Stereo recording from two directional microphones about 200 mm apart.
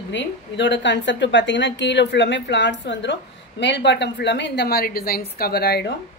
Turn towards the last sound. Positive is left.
turn(degrees=55)  # may be behind; listen again after turning